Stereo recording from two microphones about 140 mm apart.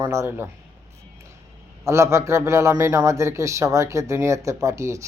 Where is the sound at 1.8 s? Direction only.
20° right (ahead or behind).